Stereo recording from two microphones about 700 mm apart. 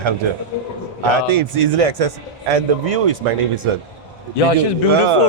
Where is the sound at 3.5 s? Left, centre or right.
Right.